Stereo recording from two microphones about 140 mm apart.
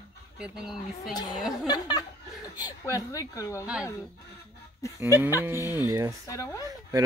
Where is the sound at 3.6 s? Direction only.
10° right (ahead or behind).